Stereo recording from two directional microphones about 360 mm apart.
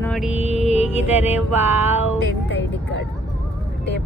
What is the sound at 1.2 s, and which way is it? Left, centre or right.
Mantra, centre.